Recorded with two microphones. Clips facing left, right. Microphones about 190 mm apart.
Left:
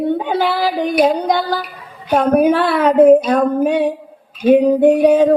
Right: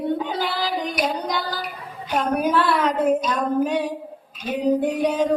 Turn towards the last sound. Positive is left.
turn(degrees=60)  # may be behind; listen again after turning